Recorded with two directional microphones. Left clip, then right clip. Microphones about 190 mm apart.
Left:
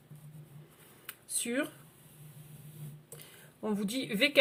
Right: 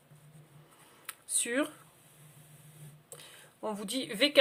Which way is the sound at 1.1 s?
30° right (ahead or behind).